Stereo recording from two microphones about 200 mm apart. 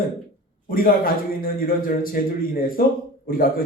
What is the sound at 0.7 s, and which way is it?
A man's voice, 45° left (ahead or behind).